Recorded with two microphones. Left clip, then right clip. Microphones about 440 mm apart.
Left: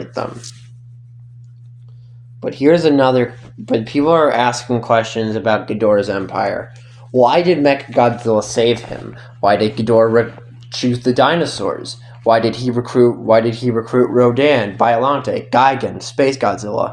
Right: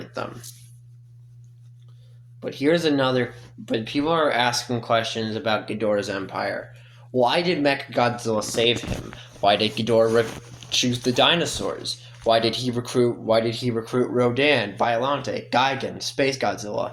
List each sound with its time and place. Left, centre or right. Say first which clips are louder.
0.0 s speech: left 8 dB; right
2.4 s speech: left 9 dB; right